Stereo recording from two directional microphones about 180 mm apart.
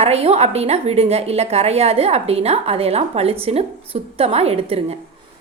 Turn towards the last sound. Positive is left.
turn(degrees=-35)  # may be behind; listen again after turning